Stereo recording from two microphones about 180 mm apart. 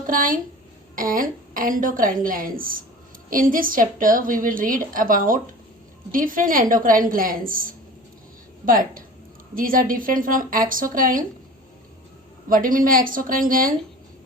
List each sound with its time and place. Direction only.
0.1 s a woman's voice: 50° right (ahead or behind)
9.6 s a woman's voice: 50° right (ahead or behind)
12.5 s a woman's voice: 50° right (ahead or behind)